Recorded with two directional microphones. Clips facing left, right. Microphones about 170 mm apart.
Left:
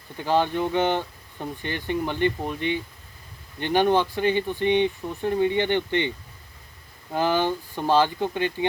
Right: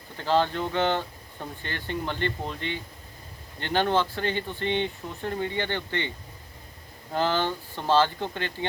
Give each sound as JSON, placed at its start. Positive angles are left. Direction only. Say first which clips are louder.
{"t": 0.2, "sound": "speech", "louder": "left 2 dB", "side_deg": 15}
{"t": 7.1, "sound": "speech", "louder": "left 3 dB", "side_deg": 15}